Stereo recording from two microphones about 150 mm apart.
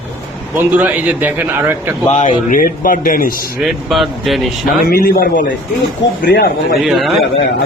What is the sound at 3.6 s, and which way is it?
Speech, centre (ahead or behind).